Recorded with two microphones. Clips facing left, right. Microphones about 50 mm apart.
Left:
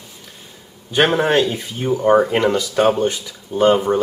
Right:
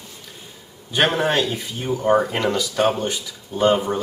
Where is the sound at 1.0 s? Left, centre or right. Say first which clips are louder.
Left 4 dB; centre.